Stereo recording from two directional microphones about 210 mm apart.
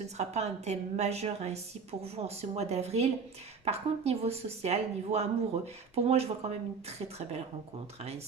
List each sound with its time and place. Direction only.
0.2 s a woman's voice: 30° right (ahead or behind)